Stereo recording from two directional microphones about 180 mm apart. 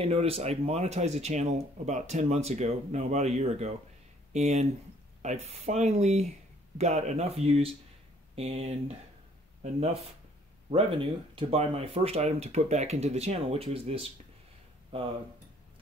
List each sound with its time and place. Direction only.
0.0 s speech: 35° right (ahead or behind)